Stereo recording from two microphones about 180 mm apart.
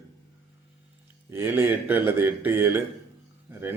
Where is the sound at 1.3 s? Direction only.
10° right (ahead or behind).